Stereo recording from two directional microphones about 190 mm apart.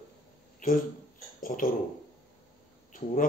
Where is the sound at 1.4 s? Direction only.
45° left (ahead or behind).